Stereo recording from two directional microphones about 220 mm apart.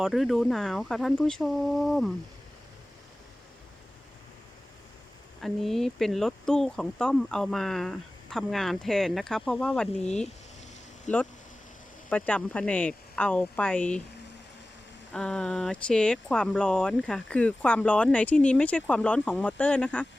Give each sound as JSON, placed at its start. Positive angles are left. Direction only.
{"t": 0.0, "sound": "speech", "side_deg": 0}
{"t": 5.4, "sound": "speech", "side_deg": 0}
{"t": 11.1, "sound": "speech", "side_deg": 35}
{"t": 12.0, "sound": "speech", "side_deg": 5}
{"t": 15.1, "sound": "speech", "side_deg": 5}